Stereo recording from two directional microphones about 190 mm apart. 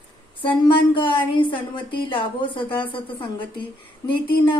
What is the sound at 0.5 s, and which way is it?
A woman's voice, 25° left (ahead or behind).